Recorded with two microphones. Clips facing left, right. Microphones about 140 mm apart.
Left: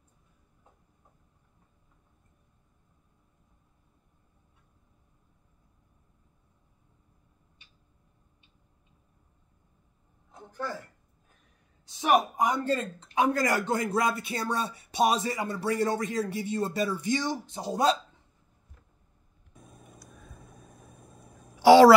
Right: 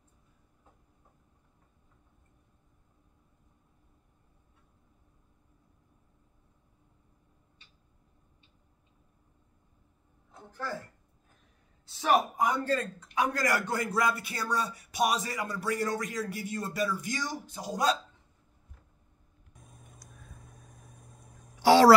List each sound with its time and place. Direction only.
11.8 s a man's voice: 15° left (ahead or behind)
20.0 s vehicle: 5° left (ahead or behind)